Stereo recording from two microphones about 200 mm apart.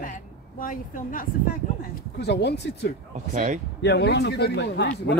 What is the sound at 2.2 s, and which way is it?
Speech, 55° left (ahead or behind).